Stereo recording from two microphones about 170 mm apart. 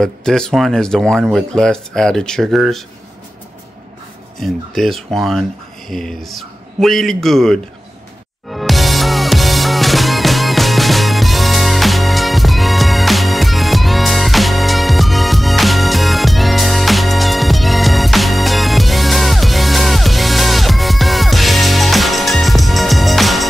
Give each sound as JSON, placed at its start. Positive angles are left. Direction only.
{"t": 0.0, "sound": "speech", "side_deg": 5}
{"t": 4.4, "sound": "speech", "side_deg": 0}
{"t": 8.5, "sound": "music", "side_deg": 0}